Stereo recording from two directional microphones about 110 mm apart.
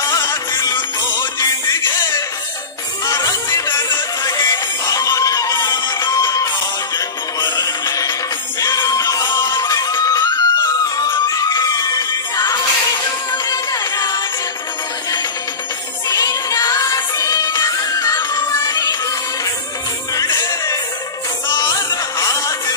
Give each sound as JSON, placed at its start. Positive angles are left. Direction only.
{"t": 3.1, "sound": "music", "side_deg": 35}
{"t": 13.5, "sound": "music", "side_deg": 35}
{"t": 16.1, "sound": "music", "side_deg": 35}
{"t": 20.2, "sound": "music", "side_deg": 30}